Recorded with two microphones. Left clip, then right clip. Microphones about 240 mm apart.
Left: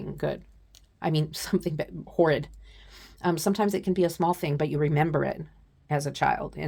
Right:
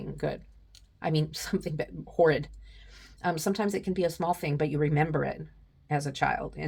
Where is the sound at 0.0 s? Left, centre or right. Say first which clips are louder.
Left 2 dB; left.